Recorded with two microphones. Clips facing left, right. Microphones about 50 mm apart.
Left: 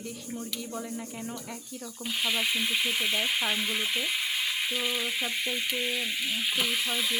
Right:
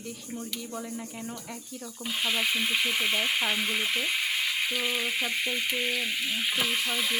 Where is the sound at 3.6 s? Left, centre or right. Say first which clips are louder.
Right 1 dB; right.